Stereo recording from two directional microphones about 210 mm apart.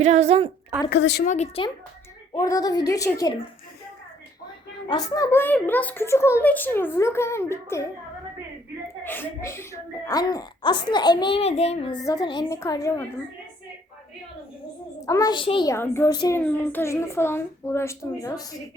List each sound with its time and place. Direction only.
0.0 s a woman's voice: 30° right (ahead or behind)
0.9 s a woman's voice: 55° left (ahead or behind)
1.3 s speech: 30° left (ahead or behind)
2.3 s a woman's voice: 15° left (ahead or behind)
4.9 s a woman's voice: 20° left (ahead or behind)
9.0 s a woman's voice: 10° left (ahead or behind)
15.0 s speech: 15° left (ahead or behind)
15.7 s a woman's voice: 10° left (ahead or behind)